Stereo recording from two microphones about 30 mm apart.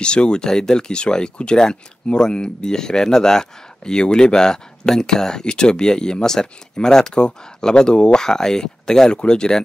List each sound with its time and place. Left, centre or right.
0.0 s speech: left
9.1 s speech: left